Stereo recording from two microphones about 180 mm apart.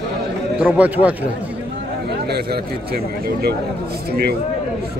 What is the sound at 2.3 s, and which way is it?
Speech, 60° right (ahead or behind).